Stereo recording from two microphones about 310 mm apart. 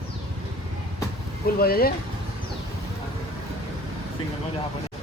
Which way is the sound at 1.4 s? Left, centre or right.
Left.